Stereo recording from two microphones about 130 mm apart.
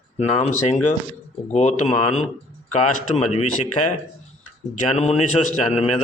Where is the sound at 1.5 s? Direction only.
55° left (ahead or behind).